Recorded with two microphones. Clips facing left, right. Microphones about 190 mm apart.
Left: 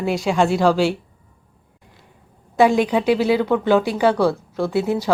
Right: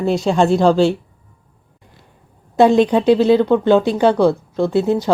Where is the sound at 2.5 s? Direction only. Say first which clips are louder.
Right 4 dB; 25° right (ahead or behind).